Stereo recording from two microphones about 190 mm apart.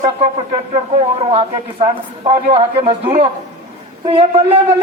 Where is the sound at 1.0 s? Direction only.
30° right (ahead or behind).